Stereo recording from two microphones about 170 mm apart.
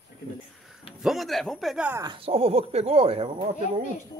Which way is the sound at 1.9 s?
20° right (ahead or behind).